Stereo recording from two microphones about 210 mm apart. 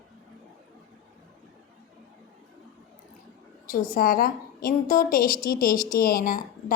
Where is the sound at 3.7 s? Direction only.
40° left (ahead or behind).